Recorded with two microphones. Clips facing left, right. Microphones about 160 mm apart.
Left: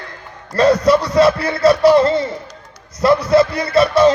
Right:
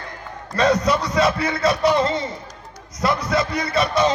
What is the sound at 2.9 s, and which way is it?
Music, 30° left (ahead or behind).